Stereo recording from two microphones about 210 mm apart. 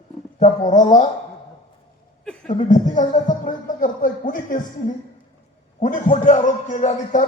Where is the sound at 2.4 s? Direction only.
35° left (ahead or behind).